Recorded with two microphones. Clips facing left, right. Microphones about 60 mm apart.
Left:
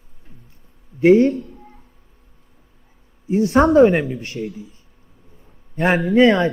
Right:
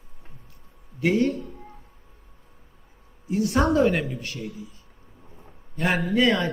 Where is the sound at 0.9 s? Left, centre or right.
Left.